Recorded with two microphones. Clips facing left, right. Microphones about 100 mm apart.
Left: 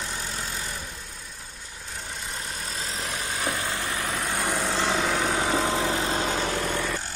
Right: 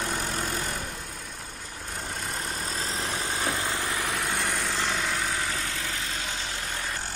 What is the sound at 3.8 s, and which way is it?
Vehicle, 20° left (ahead or behind).